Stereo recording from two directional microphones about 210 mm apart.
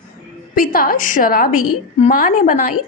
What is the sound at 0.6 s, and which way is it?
Speech, 40° left (ahead or behind).